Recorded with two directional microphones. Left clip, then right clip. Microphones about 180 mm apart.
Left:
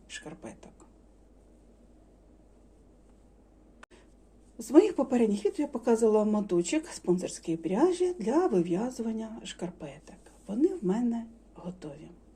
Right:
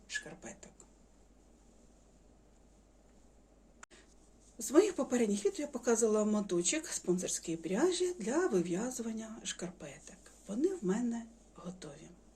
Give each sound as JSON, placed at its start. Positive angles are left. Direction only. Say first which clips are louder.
{"t": 0.1, "sound": "speech", "louder": "even", "side_deg": 20}
{"t": 4.7, "sound": "speech", "louder": "left 6 dB", "side_deg": 15}